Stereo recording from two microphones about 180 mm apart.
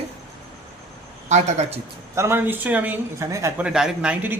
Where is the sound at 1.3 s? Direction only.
40° right (ahead or behind).